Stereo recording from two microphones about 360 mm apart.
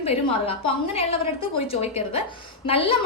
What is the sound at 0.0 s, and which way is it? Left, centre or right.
A woman's voice, centre.